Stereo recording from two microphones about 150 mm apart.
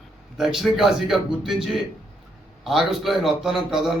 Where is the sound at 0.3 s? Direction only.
Centre (ahead or behind).